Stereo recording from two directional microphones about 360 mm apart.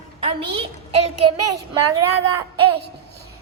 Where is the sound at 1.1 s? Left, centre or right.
Right.